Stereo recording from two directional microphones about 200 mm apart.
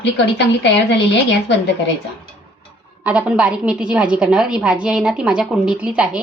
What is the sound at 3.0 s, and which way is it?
A woman's voice, 5° right (ahead or behind).